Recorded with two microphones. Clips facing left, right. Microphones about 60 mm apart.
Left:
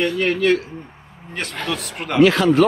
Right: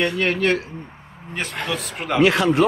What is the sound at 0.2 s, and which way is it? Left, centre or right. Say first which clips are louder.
Speech: left 4 dB; right.